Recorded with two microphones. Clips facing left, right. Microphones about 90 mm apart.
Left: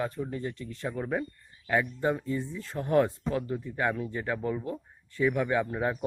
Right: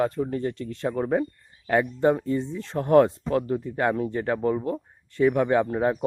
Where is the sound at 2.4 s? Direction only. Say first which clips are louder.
Right 5 dB; 25° right (ahead or behind).